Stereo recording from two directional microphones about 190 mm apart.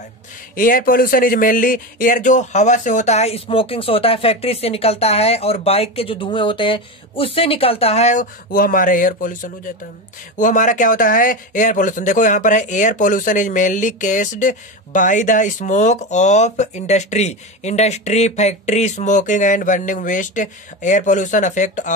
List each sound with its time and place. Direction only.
0.6 s speech: 45° left (ahead or behind)